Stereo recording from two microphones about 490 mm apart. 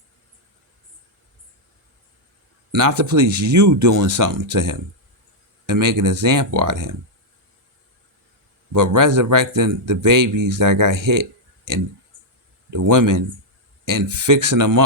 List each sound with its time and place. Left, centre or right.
2.7 s a man's voice: right
8.7 s a man's voice: right